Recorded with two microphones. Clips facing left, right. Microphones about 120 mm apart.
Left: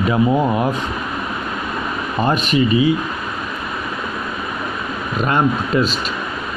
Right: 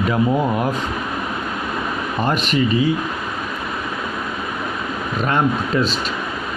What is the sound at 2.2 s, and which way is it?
Speech, 20° left (ahead or behind).